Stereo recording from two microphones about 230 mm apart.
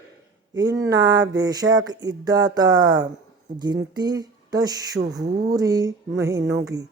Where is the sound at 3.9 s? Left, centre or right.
Centre.